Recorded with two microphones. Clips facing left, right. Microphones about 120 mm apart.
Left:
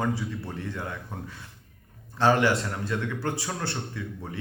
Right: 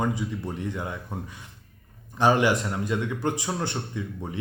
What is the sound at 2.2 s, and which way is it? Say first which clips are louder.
A man's voice: right 1 dB; 15° right (ahead or behind).